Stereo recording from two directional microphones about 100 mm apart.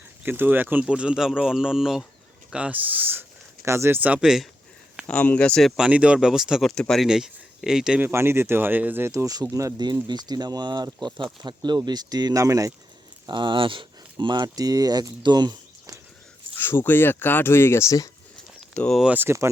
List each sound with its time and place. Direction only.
0.2 s speech: 20° right (ahead or behind)
5.0 s speech: 15° left (ahead or behind)
5.6 s speech: 5° right (ahead or behind)
8.0 s speech: 25° right (ahead or behind)
9.8 s speech: 45° right (ahead or behind)
13.2 s speech: 50° right (ahead or behind)
16.6 s speech: 25° left (ahead or behind)
18.7 s speech: 5° left (ahead or behind)
19.0 s speech: 20° right (ahead or behind)